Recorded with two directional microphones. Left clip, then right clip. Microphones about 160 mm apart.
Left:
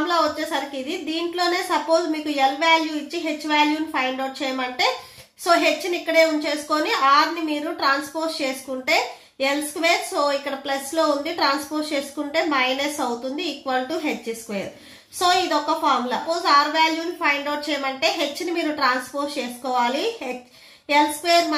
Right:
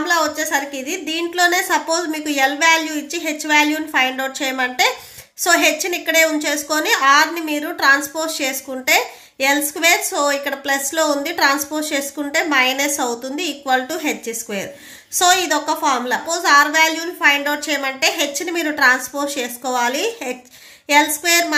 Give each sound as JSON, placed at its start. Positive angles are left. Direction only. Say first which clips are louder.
{"t": 0.1, "sound": "a woman's voice", "louder": "right 6 dB", "side_deg": -45}